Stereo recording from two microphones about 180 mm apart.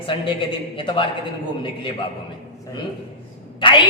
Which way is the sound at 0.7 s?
30° left (ahead or behind).